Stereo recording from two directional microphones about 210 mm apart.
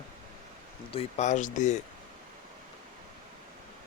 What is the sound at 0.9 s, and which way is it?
Speech, 30° left (ahead or behind).